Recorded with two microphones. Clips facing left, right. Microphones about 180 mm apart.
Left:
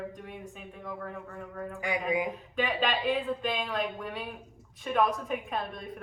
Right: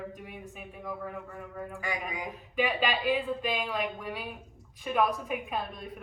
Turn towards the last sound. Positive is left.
turn(degrees=0)  # may be behind; listen again after turning